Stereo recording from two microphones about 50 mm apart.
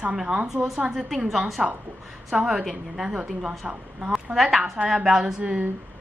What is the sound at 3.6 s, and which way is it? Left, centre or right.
Speech, right.